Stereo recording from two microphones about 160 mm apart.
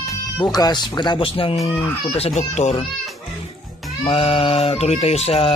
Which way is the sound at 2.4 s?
45° left (ahead or behind).